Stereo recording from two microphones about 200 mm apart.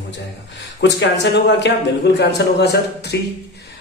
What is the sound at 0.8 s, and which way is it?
Speech, 60° left (ahead or behind).